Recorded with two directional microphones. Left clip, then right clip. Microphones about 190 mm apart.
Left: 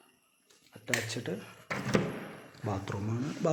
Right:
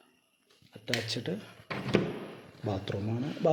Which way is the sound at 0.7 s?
15° right (ahead or behind).